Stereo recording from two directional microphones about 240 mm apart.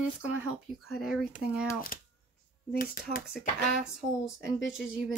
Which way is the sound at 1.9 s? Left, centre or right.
Left.